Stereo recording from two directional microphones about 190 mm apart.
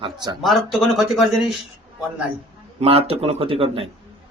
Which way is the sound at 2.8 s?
30° right (ahead or behind).